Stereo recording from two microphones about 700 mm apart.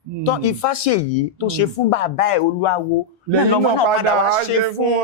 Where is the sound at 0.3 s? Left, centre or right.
Left.